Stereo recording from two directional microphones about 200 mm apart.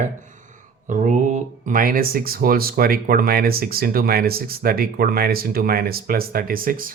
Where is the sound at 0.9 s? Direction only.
40° right (ahead or behind).